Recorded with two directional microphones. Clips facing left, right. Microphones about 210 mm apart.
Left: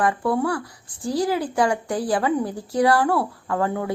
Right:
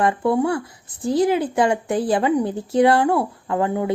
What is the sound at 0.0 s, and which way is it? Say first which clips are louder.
Speech: right 3 dB; 25° right (ahead or behind).